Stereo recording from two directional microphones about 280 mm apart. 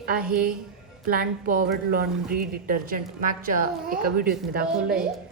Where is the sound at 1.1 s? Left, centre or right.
Right.